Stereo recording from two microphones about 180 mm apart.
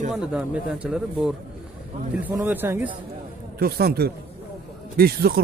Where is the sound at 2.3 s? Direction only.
15° right (ahead or behind).